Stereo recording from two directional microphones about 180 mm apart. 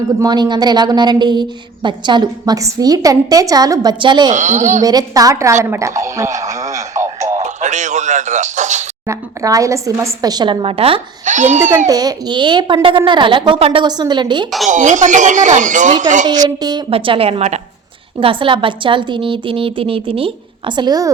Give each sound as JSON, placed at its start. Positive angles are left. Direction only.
{"t": 0.2, "sound": "a woman's voice", "side_deg": -25}
{"t": 4.3, "sound": "speech", "side_deg": -40}
{"t": 4.8, "sound": "a woman's voice", "side_deg": -20}
{"t": 7.3, "sound": "speech", "side_deg": -40}
{"t": 9.0, "sound": "a woman's voice", "side_deg": -20}
{"t": 11.9, "sound": "a woman's voice", "side_deg": -20}
{"t": 14.7, "sound": "speech", "side_deg": -45}
{"t": 16.6, "sound": "a woman's voice", "side_deg": -25}